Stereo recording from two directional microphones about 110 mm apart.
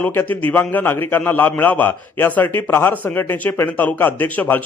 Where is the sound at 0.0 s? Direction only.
15° left (ahead or behind).